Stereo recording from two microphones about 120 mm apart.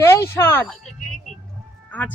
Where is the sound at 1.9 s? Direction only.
15° left (ahead or behind).